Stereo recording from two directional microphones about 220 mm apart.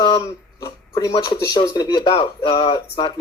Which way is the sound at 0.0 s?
20° left (ahead or behind).